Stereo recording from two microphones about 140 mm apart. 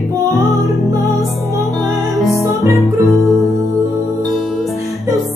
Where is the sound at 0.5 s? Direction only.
25° right (ahead or behind).